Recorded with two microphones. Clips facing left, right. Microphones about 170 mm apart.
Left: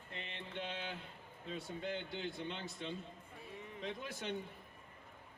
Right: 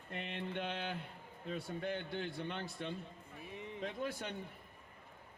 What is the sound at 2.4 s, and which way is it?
A man's voice, 55° right (ahead or behind).